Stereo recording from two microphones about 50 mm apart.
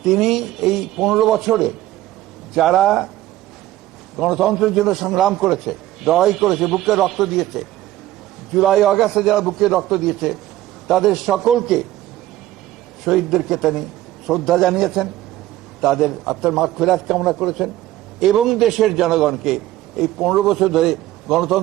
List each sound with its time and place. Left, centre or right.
0.0 s a man's voice: centre
4.2 s a man's voice: centre
13.1 s a man's voice: centre